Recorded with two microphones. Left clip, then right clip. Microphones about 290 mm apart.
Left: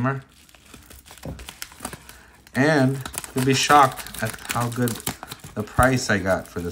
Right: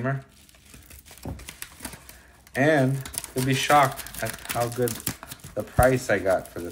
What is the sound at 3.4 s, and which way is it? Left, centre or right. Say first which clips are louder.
Speech: left 4 dB; centre.